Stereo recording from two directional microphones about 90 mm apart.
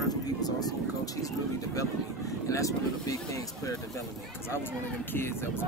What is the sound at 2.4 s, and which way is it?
Speech, 35° left (ahead or behind).